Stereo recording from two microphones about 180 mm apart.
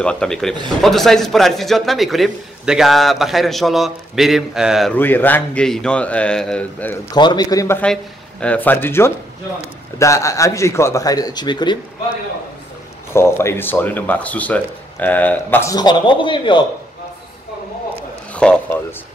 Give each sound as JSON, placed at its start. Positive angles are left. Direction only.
{"t": 0.0, "sound": "a man's voice", "side_deg": 5}
{"t": 4.9, "sound": "speech", "side_deg": 10}
{"t": 7.2, "sound": "a man's voice", "side_deg": 25}
{"t": 13.1, "sound": "speech", "side_deg": 15}
{"t": 18.3, "sound": "a sound", "side_deg": 5}